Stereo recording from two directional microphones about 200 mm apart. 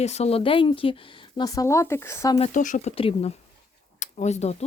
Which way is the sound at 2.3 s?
35° left (ahead or behind).